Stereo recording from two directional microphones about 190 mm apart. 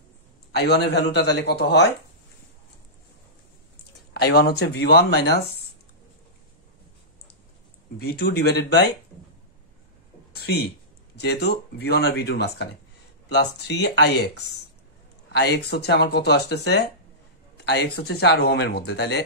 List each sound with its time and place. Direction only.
0.6 s speech: 60° left (ahead or behind)
4.1 s speech: 60° left (ahead or behind)
8.0 s speech: 55° left (ahead or behind)
10.3 s a sound: 60° left (ahead or behind)
11.1 s speech: 60° left (ahead or behind)